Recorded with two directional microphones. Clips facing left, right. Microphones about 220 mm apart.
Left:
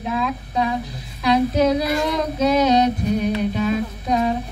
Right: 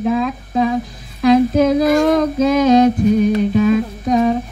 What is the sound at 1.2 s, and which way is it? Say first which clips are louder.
Female singing: right 6 dB; 50° right (ahead or behind).